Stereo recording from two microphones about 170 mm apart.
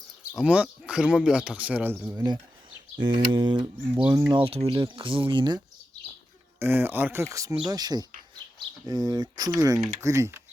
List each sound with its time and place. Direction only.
0.3 s speech: 5° right (ahead or behind)
3.0 s speech: 25° right (ahead or behind)
6.6 s speech: 10° right (ahead or behind)